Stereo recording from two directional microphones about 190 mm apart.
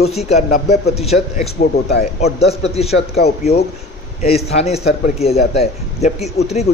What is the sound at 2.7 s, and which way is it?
Speech, 35° left (ahead or behind).